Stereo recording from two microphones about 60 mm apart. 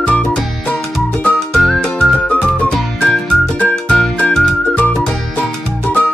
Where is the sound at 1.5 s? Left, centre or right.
Centre.